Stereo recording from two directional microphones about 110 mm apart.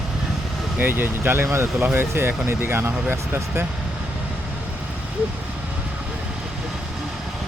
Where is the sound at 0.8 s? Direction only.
20° right (ahead or behind).